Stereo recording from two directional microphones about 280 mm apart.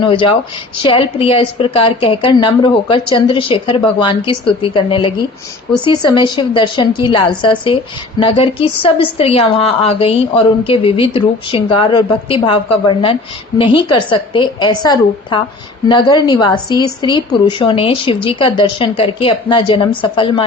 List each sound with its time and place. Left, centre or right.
0.0 s a woman's voice: centre